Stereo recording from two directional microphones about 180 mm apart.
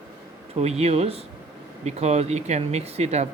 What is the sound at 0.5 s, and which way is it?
Speech, 35° right (ahead or behind).